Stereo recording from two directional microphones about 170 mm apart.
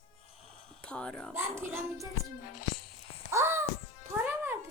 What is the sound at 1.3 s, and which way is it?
Music, 15° right (ahead or behind).